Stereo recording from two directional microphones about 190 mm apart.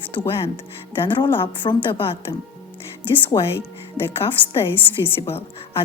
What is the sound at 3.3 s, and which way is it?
Speech, 20° left (ahead or behind).